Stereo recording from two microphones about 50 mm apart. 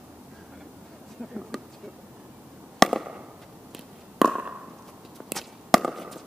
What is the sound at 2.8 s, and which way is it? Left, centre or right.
Chop, centre.